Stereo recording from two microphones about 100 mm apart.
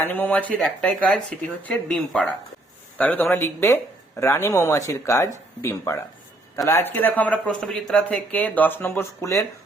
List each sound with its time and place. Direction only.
0.0 s speech: 15° left (ahead or behind)